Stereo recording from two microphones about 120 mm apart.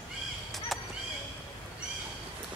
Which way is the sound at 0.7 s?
Centre (ahead or behind).